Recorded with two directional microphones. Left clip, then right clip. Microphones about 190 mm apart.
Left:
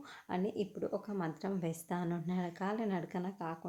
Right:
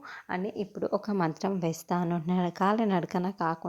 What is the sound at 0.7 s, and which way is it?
Speech, 30° right (ahead or behind).